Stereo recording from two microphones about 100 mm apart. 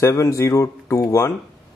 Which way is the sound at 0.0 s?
30° left (ahead or behind).